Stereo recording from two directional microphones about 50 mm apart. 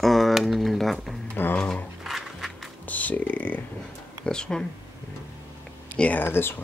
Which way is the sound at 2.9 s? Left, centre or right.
Left.